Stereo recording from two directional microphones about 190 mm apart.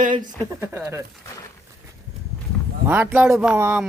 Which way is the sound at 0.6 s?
10° right (ahead or behind).